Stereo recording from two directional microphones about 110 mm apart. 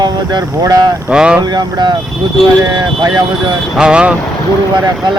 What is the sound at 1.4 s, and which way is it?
Speech, 40° right (ahead or behind).